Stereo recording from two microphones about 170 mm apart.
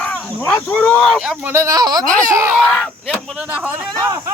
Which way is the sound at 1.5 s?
20° right (ahead or behind).